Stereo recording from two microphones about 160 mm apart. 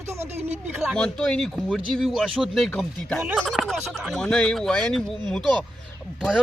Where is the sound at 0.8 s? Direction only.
5° left (ahead or behind).